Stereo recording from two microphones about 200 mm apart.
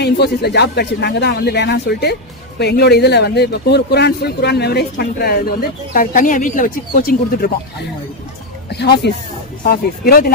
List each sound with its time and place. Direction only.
0.0 s speech: 55° left (ahead or behind)
8.6 s speech: 55° left (ahead or behind)